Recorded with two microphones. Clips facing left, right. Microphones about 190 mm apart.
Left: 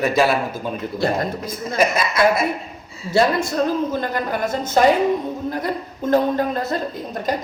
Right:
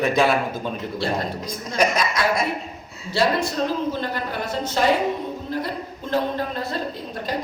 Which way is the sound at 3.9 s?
45° left (ahead or behind).